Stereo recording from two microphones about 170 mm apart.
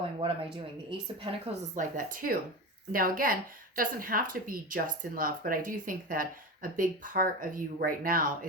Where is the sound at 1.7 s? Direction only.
50° right (ahead or behind).